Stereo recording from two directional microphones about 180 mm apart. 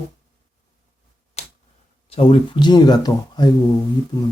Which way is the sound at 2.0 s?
30° left (ahead or behind).